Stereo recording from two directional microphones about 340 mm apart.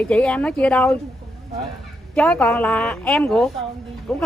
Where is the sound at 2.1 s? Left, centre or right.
Centre.